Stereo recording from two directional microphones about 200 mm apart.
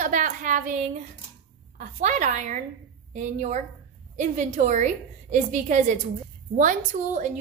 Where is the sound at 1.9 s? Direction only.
40° right (ahead or behind).